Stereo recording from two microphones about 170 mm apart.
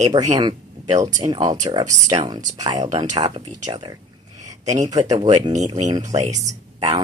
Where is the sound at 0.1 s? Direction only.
25° right (ahead or behind).